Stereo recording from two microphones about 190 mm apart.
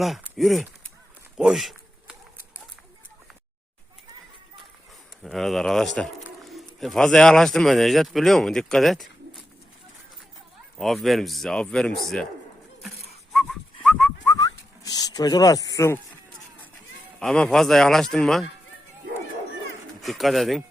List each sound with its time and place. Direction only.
0.0 s speech: centre (ahead or behind)
1.4 s a sound: centre (ahead or behind)
5.2 s speech: centre (ahead or behind)
6.2 s a sound: centre (ahead or behind)
6.7 s speech: centre (ahead or behind)
10.8 s speech: centre (ahead or behind)
13.3 s whistling: centre (ahead or behind)
14.3 s a sound: 20° left (ahead or behind)
17.2 s speech: 5° left (ahead or behind)
20.0 s speech: centre (ahead or behind)